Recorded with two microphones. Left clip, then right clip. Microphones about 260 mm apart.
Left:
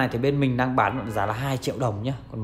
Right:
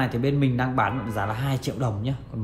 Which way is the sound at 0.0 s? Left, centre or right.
Left.